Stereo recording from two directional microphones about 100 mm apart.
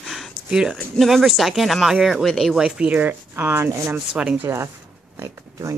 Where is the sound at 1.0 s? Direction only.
Centre (ahead or behind); by 4.0 s 25° right (ahead or behind).